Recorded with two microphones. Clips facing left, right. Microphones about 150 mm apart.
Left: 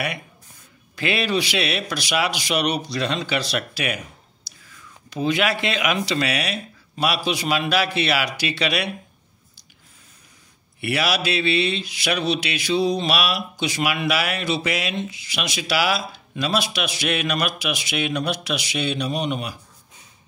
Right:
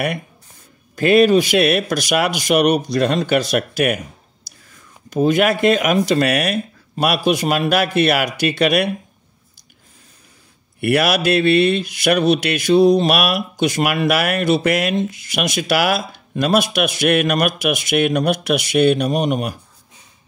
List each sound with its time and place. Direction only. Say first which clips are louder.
0.9 s speech: right 11 dB; 45° right (ahead or behind)
10.8 s speech: right 7 dB; 55° right (ahead or behind)